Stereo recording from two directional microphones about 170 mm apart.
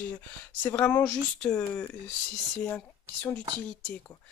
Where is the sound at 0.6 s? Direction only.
10° left (ahead or behind).